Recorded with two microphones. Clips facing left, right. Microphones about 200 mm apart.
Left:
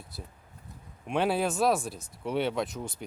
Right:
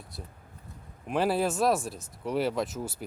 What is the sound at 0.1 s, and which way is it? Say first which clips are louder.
Speech: right 1 dB; centre (ahead or behind).